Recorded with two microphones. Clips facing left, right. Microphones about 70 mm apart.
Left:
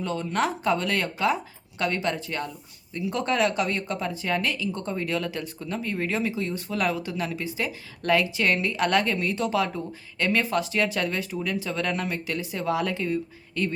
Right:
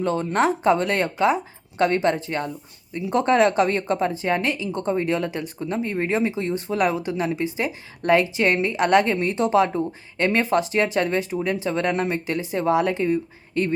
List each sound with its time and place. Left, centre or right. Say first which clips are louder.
0.0 s a woman's voice: right 5 dB; right